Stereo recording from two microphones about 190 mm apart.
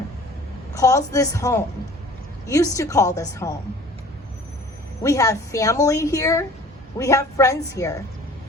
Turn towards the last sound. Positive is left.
turn(degrees=15)  # may be behind; listen again after turning